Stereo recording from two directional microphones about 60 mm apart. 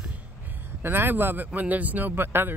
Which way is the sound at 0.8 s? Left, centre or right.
Right.